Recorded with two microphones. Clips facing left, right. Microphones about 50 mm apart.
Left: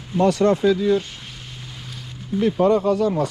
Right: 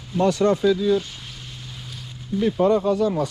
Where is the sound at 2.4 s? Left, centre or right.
Left.